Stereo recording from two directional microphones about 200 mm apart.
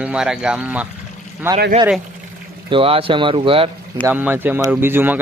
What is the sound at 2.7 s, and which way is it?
Speech, 25° right (ahead or behind).